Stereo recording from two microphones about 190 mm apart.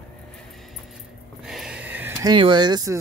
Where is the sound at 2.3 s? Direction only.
25° right (ahead or behind).